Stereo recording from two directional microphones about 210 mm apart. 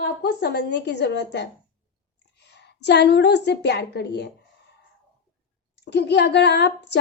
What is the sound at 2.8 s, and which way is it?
A woman's voice, 50° left (ahead or behind).